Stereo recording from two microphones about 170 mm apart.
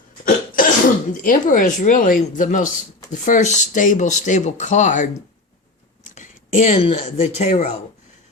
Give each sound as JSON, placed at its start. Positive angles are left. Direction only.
{"t": 0.3, "sound": "cough", "side_deg": 55}
{"t": 1.1, "sound": "speech", "side_deg": 50}
{"t": 6.1, "sound": "a sound", "side_deg": 45}
{"t": 6.8, "sound": "speech", "side_deg": 45}